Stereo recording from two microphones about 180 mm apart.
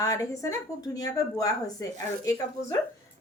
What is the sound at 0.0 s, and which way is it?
Speech, 20° left (ahead or behind).